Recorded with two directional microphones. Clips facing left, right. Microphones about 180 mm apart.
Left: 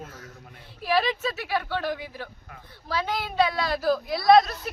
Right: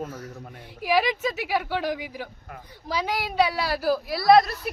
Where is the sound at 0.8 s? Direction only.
15° right (ahead or behind).